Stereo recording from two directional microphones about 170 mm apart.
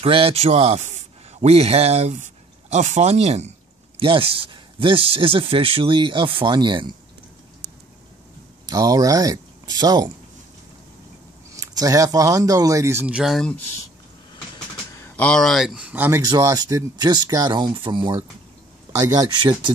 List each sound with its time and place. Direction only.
0.0 s speech: 35° right (ahead or behind)
8.6 s speech: 20° right (ahead or behind)
11.5 s speech: 20° right (ahead or behind); by 13.6 s centre (ahead or behind)
15.0 s speech: 5° left (ahead or behind); by 16.2 s 10° right (ahead or behind)
16.2 s speech: 20° right (ahead or behind)